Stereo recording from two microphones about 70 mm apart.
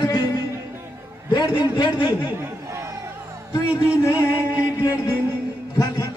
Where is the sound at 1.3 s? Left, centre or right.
Left.